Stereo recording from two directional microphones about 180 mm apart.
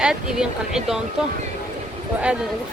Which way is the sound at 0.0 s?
5° right (ahead or behind).